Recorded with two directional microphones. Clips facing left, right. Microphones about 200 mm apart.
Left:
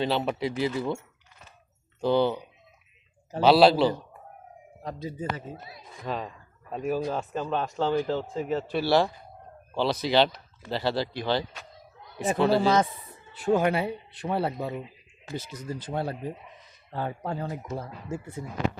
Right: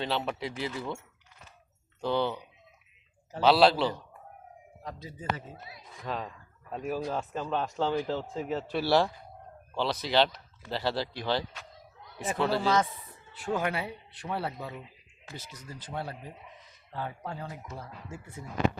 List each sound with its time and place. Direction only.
0.3 s speech: 10° left (ahead or behind)
2.0 s speech: 10° left (ahead or behind)
3.4 s speech: 10° left (ahead or behind)
4.8 s a man's voice: 25° left (ahead or behind)
6.1 s speech: 5° left (ahead or behind)
12.2 s speech: 30° left (ahead or behind)